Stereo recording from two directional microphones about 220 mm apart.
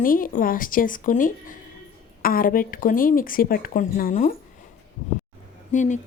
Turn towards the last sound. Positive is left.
turn(degrees=35)  # may be behind; listen again after turning